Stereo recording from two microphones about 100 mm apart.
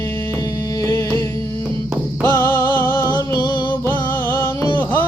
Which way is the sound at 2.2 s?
25° left (ahead or behind).